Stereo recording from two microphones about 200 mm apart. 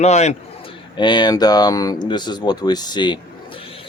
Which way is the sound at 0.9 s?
20° left (ahead or behind).